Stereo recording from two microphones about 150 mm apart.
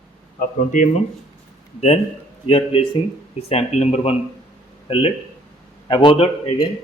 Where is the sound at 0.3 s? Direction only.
60° left (ahead or behind).